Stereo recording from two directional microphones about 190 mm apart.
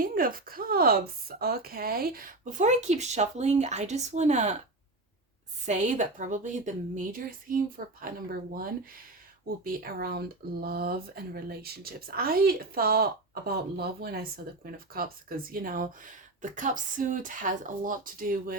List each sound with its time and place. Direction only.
0.0 s speech: 50° right (ahead or behind)
5.6 s speech: 40° right (ahead or behind)